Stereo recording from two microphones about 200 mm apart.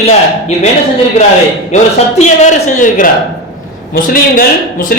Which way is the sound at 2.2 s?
35° left (ahead or behind).